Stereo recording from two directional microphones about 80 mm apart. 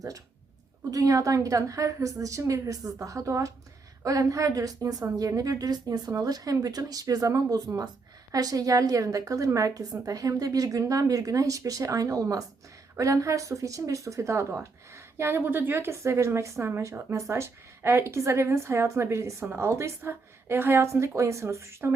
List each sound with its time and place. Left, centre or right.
0.9 s a woman's voice: right